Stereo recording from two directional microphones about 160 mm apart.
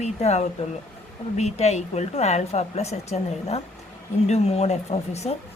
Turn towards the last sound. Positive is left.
turn(degrees=40)  # may be behind; listen again after turning